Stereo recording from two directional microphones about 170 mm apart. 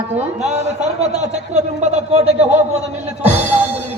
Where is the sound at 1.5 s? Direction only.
40° right (ahead or behind).